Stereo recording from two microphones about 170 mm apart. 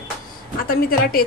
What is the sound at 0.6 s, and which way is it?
Speech, 60° left (ahead or behind).